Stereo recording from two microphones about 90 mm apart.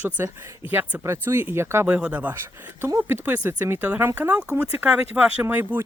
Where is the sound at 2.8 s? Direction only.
30° right (ahead or behind).